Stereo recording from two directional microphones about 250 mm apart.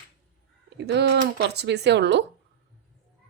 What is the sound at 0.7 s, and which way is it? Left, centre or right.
Speech, right.